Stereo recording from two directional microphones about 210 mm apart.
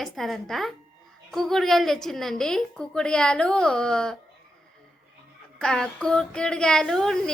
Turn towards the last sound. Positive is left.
turn(degrees=0)  # may be behind; listen again after turning